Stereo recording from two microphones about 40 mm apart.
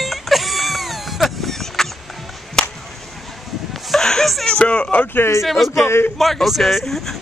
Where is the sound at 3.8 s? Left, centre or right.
Centre.